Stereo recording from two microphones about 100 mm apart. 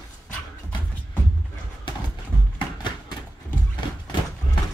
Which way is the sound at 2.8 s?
50° left (ahead or behind).